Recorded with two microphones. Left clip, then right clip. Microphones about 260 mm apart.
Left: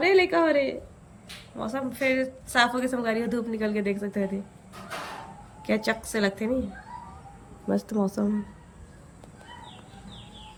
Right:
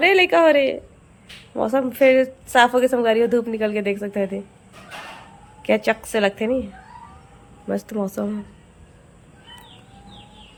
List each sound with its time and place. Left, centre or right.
0.0 s a woman's voice: centre
5.6 s a woman's voice: centre
7.9 s speech: centre